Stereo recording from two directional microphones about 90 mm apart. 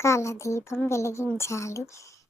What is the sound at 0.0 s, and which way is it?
A child's voice, 30° left (ahead or behind).